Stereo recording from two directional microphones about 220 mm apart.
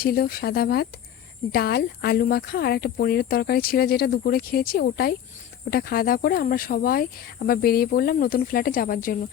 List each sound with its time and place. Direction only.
0.0 s speech: 45° left (ahead or behind)